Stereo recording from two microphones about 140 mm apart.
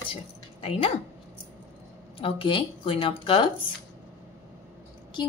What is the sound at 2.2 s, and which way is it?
Speech, 40° left (ahead or behind).